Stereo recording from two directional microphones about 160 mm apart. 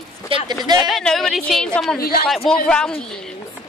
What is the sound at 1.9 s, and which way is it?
Speech, 70° left (ahead or behind).